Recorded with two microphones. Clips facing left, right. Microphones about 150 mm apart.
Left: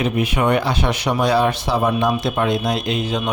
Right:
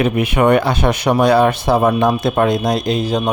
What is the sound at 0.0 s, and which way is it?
Speech, 60° right (ahead or behind).